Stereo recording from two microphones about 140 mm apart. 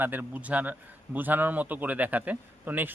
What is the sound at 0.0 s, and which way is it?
A man's voice, 10° right (ahead or behind).